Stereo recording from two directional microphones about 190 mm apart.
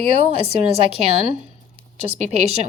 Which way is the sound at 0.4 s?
30° right (ahead or behind).